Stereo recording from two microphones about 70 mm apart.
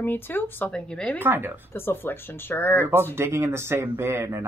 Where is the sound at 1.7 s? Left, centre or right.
Left.